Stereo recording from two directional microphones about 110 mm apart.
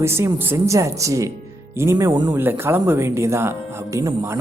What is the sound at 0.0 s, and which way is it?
Speech, 25° right (ahead or behind).